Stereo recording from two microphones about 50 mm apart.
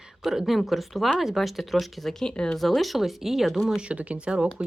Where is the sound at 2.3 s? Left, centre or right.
Left.